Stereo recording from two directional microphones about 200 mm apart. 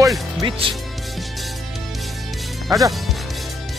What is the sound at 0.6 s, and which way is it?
Speech, 25° right (ahead or behind).